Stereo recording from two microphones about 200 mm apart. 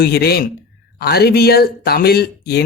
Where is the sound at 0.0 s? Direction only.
50° left (ahead or behind).